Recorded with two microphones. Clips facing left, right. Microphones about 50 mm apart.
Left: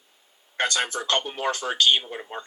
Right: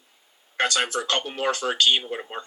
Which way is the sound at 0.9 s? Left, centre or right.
Right.